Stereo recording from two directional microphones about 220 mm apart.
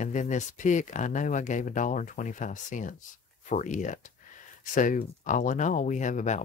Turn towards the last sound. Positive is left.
turn(degrees=35)  # may be behind; listen again after turning